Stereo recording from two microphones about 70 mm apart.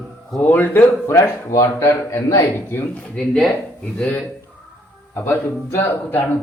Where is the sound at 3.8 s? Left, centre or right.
Left.